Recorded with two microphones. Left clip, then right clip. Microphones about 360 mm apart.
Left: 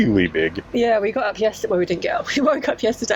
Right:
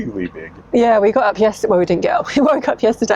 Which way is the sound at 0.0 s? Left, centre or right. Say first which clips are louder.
Left 8 dB; left.